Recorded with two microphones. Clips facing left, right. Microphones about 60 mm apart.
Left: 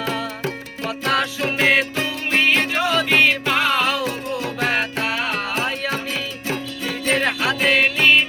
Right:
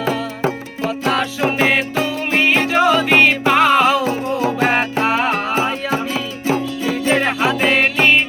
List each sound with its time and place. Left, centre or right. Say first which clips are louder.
0.9 s music: right 2 dB; centre
1.6 s music: left 2 dB; centre